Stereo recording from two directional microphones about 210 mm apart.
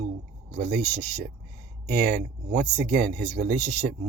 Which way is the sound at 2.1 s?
50° right (ahead or behind).